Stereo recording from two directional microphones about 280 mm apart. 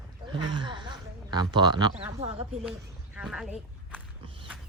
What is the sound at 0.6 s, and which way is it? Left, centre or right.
Speech, centre.